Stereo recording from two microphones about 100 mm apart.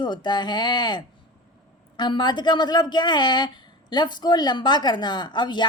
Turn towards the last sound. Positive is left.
turn(degrees=50)  # may be behind; listen again after turning